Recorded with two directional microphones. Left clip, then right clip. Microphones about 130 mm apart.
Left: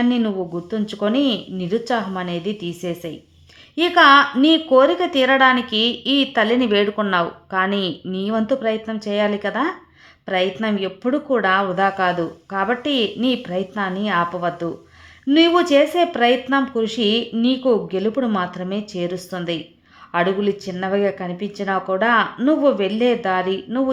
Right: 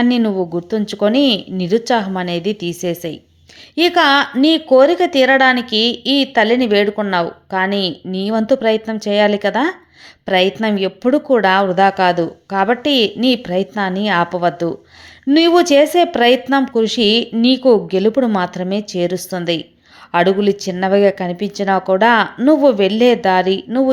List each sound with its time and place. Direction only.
0.0 s a woman's voice: 30° right (ahead or behind)